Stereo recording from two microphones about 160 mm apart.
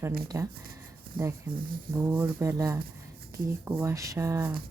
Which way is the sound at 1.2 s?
65° right (ahead or behind).